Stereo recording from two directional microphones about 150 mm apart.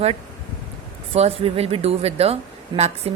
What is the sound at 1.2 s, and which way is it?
A woman's voice, 40° right (ahead or behind).